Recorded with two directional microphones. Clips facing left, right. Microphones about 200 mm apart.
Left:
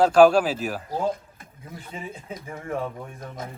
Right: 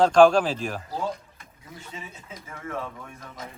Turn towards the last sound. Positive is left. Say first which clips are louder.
# left 4 dB
turn(degrees=50)  # may be behind; listen again after turning